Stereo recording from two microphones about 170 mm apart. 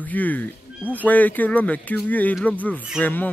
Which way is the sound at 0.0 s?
10° left (ahead or behind).